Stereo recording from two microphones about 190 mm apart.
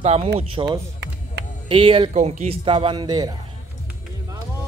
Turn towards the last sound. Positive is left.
turn(degrees=-20)  # may be behind; listen again after turning